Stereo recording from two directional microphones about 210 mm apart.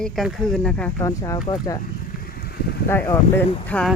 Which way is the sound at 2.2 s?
45° left (ahead or behind).